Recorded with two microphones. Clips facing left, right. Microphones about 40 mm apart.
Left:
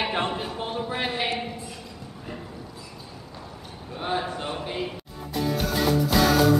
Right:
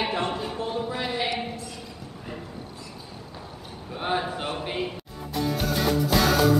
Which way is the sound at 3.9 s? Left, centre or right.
Centre.